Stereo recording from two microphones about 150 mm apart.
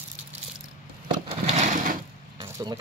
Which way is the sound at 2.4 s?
25° right (ahead or behind).